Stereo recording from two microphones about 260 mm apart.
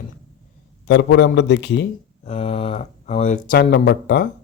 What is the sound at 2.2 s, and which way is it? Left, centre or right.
Speech, left.